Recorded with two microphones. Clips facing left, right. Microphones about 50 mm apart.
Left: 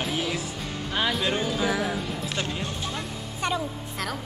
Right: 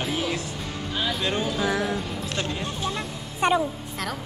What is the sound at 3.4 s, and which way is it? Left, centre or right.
Speech, right.